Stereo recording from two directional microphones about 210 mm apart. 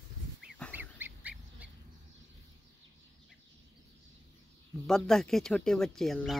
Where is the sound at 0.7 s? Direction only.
10° right (ahead or behind).